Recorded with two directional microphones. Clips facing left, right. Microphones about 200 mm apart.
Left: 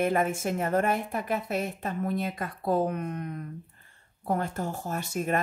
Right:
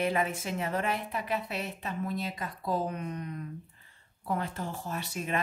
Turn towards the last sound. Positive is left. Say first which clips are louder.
# left 5 dB
turn(degrees=45)  # may be behind; listen again after turning